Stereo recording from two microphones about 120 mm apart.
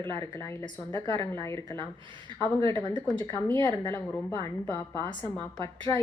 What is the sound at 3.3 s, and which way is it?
Speech, 20° left (ahead or behind).